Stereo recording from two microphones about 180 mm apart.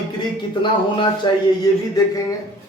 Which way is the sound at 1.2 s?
25° left (ahead or behind).